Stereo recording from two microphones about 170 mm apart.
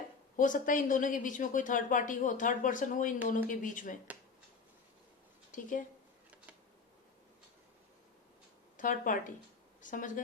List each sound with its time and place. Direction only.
0.3 s speech: 50° left (ahead or behind)
5.5 s a woman's voice: 50° left (ahead or behind)
8.8 s speech: 50° left (ahead or behind)